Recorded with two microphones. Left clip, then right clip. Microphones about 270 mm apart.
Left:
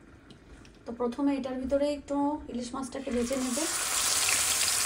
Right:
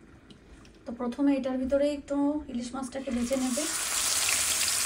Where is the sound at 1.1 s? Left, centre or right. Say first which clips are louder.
Right 6 dB; centre.